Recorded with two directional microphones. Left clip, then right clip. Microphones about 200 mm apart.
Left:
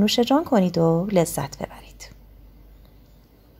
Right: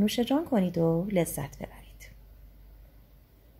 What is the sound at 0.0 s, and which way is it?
A woman's voice, 20° left (ahead or behind).